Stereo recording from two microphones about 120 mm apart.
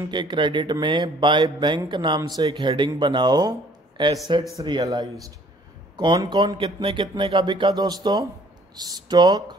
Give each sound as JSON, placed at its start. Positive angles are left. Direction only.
{"t": 0.1, "sound": "speech", "side_deg": -40}
{"t": 4.6, "sound": "speech", "side_deg": -35}